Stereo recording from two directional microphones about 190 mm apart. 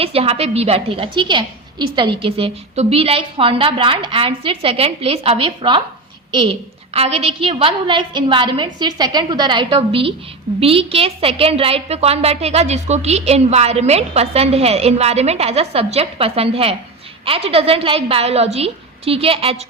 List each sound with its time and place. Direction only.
0.0 s a woman's voice: 30° right (ahead or behind)